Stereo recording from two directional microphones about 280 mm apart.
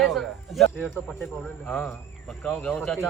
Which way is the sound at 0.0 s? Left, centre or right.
Centre.